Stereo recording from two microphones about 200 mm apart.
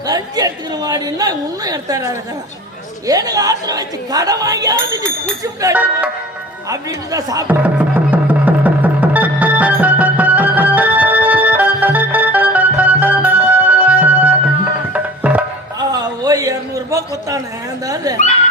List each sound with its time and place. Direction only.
0.0 s a woman's voice: 20° right (ahead or behind)
6.7 s music: 15° right (ahead or behind)
15.8 s a sound: 20° right (ahead or behind)
17.8 s speech: 20° right (ahead or behind)